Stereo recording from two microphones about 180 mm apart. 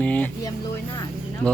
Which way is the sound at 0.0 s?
5° left (ahead or behind).